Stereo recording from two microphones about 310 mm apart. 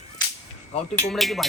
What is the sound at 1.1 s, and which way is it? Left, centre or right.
Speech, centre.